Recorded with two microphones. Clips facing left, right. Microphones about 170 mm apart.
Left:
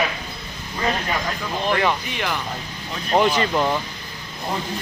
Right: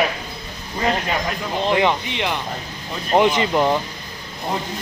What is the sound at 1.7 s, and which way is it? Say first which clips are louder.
Speech: right 3 dB; 20° right (ahead or behind).